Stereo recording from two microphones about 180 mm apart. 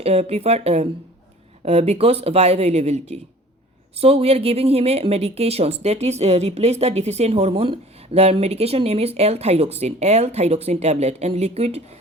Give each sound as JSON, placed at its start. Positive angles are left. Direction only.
{"t": 0.0, "sound": "a woman's voice", "side_deg": -35}